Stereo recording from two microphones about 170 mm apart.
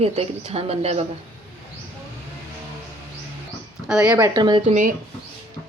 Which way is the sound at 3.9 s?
5° right (ahead or behind).